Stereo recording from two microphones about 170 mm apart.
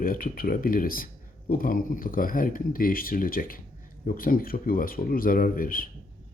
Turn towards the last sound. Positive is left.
turn(degrees=55)  # may be behind; listen again after turning